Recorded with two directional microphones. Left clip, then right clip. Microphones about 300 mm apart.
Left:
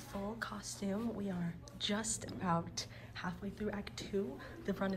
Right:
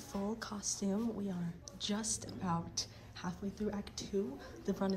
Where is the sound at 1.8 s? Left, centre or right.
Centre.